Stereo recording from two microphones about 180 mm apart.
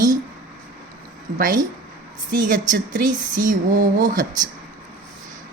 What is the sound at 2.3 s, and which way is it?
A woman's voice, 45° right (ahead or behind).